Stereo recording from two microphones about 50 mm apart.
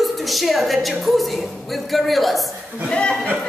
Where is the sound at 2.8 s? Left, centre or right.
Centre.